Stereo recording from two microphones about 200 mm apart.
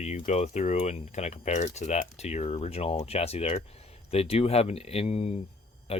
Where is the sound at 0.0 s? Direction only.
35° left (ahead or behind).